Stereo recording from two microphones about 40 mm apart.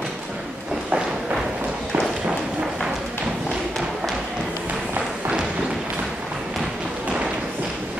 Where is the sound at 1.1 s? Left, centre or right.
Centre.